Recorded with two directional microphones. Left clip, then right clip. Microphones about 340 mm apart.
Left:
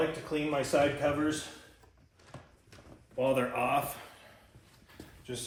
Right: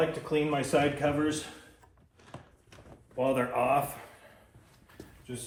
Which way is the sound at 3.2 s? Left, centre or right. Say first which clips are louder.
Right 1 dB; centre.